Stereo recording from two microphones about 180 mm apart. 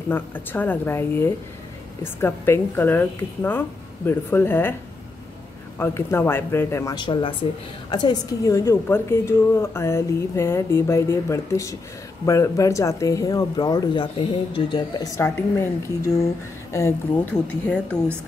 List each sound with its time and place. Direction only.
0.1 s a woman's voice: 10° left (ahead or behind)
5.8 s a woman's voice: 15° left (ahead or behind)
15.1 s a woman's voice: 15° left (ahead or behind)